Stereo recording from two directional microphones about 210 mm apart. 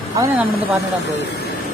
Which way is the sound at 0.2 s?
10° right (ahead or behind).